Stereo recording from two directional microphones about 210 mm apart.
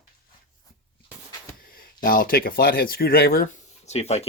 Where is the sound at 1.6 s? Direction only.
45° left (ahead or behind).